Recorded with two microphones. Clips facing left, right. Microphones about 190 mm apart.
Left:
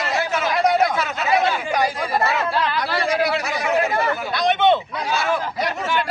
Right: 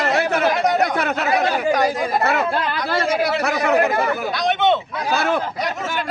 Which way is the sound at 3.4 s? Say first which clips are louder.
Right 4 dB; 60° right (ahead or behind).